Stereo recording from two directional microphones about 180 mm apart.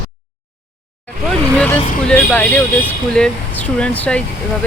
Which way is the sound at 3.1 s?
5° left (ahead or behind).